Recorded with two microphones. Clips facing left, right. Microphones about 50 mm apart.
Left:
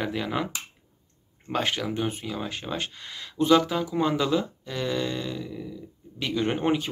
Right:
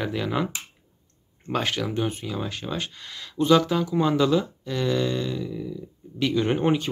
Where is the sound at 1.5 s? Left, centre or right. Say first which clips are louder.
Right 1 dB; centre.